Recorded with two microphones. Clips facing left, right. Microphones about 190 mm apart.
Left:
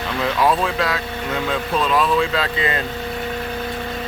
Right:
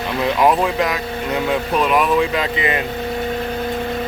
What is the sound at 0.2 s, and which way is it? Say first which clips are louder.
Speech: right 3 dB; 20° right (ahead or behind).